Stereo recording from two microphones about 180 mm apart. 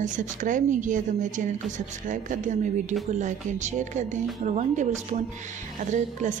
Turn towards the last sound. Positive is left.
turn(degrees=-45)  # may be behind; listen again after turning